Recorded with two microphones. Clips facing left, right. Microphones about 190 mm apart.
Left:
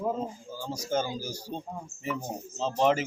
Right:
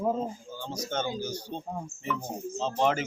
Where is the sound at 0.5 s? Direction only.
5° left (ahead or behind).